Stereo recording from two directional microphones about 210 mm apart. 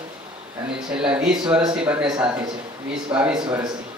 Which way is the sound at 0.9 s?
5° right (ahead or behind).